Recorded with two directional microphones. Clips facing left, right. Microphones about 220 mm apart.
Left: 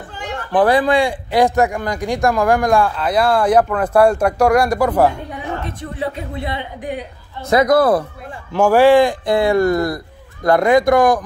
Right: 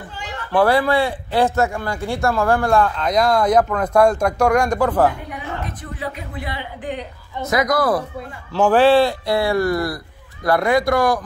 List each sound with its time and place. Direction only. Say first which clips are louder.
0.5 s speech: left 2 dB; 15° left (ahead or behind)
5.9 s speech: left 6 dB; 25° left (ahead or behind)
7.7 s speech: left 6 dB; 55° left (ahead or behind)
8.5 s speech: left 3 dB; 10° left (ahead or behind)